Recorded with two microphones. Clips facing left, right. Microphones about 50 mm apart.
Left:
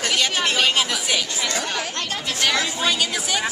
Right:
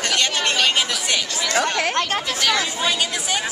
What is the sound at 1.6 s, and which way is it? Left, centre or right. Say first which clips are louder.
Speech: right 6 dB; right.